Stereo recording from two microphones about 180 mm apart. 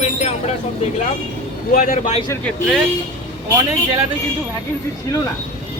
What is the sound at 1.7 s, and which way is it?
Speech, 45° left (ahead or behind).